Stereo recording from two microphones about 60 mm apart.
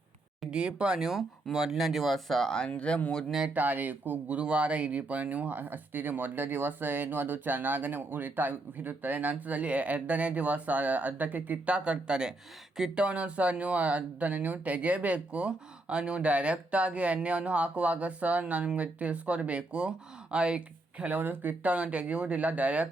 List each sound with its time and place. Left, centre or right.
0.5 s speech: centre
2.6 s speech: centre
3.5 s speech: right
4.4 s speech: centre
13.1 s speech: right
21.0 s speech: right